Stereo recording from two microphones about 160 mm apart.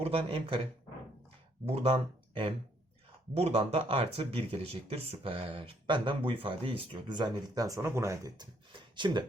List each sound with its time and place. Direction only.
0.0 s speech: 35° right (ahead or behind)